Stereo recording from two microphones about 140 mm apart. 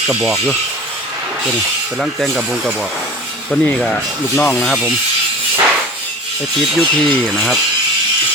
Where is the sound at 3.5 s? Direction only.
5° left (ahead or behind).